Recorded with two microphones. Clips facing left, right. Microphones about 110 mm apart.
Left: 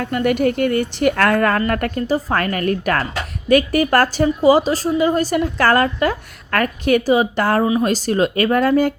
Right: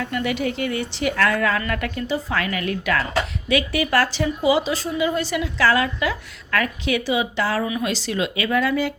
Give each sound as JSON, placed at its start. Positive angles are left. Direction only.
{"t": 0.0, "sound": "a woman's voice", "side_deg": 50}